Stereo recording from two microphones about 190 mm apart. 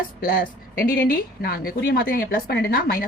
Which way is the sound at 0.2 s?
50° left (ahead or behind).